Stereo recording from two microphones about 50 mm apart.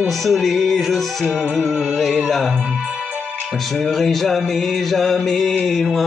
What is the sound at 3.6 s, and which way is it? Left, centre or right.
Music, centre.